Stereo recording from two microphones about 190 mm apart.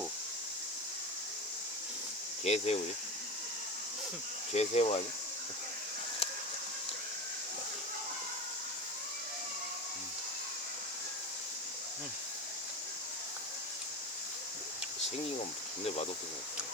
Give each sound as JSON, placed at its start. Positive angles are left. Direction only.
{"t": 2.4, "sound": "speech", "side_deg": 35}
{"t": 4.5, "sound": "speech", "side_deg": 35}